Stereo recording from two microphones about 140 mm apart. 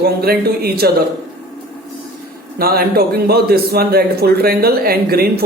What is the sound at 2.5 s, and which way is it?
Speech, 90° right.